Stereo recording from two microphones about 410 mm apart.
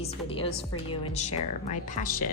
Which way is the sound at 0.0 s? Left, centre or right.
Centre.